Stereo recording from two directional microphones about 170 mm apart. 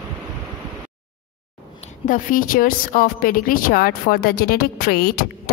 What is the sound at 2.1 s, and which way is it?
A woman's voice, 55° left (ahead or behind).